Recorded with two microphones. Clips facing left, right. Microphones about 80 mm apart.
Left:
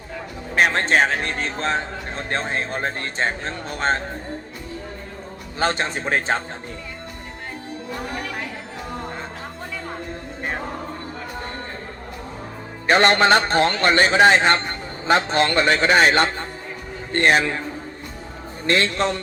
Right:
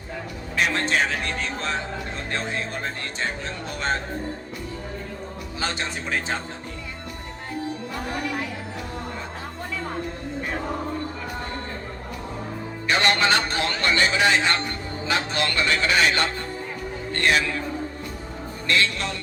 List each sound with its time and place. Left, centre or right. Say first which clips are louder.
0.5 s a man's voice: left 5 dB; left
5.5 s a man's voice: left 7 dB; left
12.9 s a man's voice: left 6 dB; left
18.6 s a man's voice: left 4 dB; left